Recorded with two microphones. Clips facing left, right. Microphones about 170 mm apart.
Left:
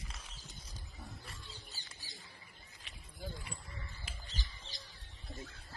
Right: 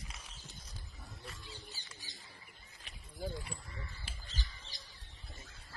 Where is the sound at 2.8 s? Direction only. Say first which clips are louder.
Right 5 dB; 40° right (ahead or behind).